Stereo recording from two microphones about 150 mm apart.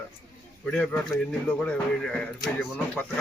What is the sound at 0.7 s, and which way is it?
A man's voice, 5° left (ahead or behind).